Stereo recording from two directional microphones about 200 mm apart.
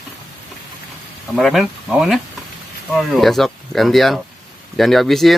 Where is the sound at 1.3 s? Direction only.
Centre (ahead or behind).